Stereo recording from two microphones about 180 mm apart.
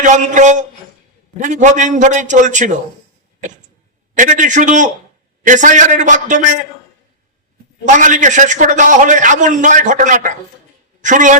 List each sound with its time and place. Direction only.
0.0 s a man's voice: 45° right (ahead or behind)
4.2 s a man's voice: 45° right (ahead or behind)
7.9 s a man's voice: 45° right (ahead or behind)